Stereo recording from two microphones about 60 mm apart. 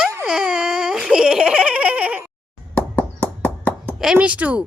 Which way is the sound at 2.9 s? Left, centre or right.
Left.